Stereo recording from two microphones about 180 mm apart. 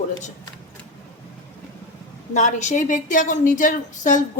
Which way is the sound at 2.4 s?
40° left (ahead or behind).